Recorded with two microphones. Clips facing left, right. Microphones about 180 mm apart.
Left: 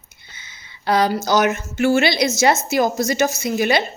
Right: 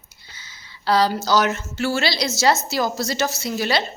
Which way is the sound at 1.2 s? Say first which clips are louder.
Left 2 dB; 20° left (ahead or behind).